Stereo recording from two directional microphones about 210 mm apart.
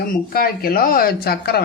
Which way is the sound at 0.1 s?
45° left (ahead or behind).